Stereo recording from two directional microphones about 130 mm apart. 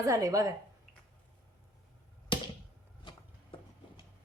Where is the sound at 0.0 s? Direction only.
25° right (ahead or behind).